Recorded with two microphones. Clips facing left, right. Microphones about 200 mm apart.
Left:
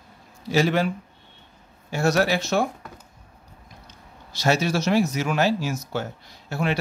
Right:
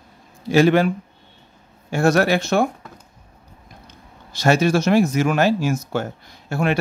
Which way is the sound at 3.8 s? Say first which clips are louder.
Right 2 dB; 55° right (ahead or behind).